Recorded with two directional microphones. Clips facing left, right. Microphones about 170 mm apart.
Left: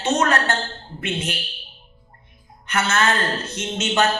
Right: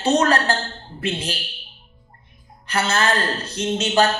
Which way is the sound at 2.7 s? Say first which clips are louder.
Even; 35° right (ahead or behind).